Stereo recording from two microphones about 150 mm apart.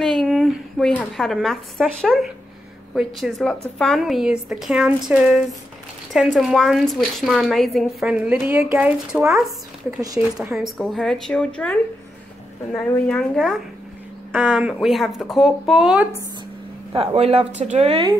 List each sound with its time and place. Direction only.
0.0 s a woman's voice: centre (ahead or behind)
10.5 s speech: centre (ahead or behind)
13.0 s speech: 5° left (ahead or behind)
14.3 s speech: 10° right (ahead or behind)
16.9 s speech: 40° right (ahead or behind)